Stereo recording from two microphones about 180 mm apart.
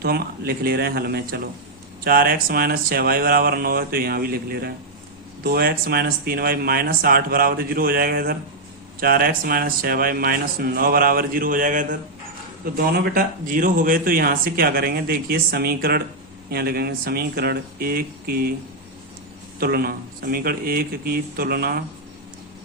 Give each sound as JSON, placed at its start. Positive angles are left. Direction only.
{"t": 0.0, "sound": "speech", "side_deg": -55}
{"t": 12.7, "sound": "speech", "side_deg": -60}
{"t": 19.5, "sound": "speech", "side_deg": -55}